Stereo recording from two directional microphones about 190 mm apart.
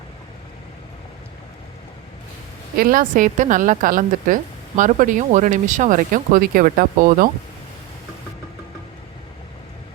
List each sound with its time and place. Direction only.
2.7 s speech: 50° right (ahead or behind)